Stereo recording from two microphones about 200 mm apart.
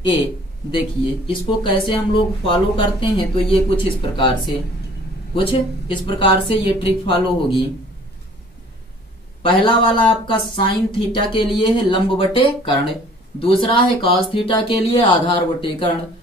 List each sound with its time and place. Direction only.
0.7 s speech: 25° left (ahead or behind)
5.3 s speech: 25° left (ahead or behind)
9.4 s speech: 25° left (ahead or behind)